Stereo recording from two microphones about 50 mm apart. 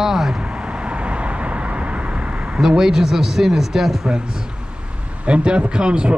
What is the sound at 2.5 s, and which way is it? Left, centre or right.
A man's voice, centre.